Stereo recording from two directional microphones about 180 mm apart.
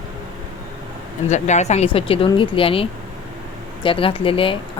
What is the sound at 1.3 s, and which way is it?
Speech, 40° left (ahead or behind).